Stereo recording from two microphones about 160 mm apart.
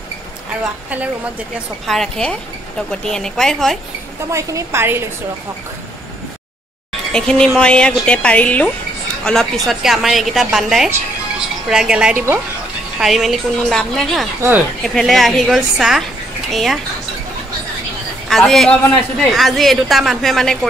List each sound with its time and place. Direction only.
1.9 s a woman's voice: 5° left (ahead or behind)
4.3 s a woman's voice: 20° right (ahead or behind)
7.1 s a woman's voice: 5° left (ahead or behind)
18.3 s a woman's voice: centre (ahead or behind)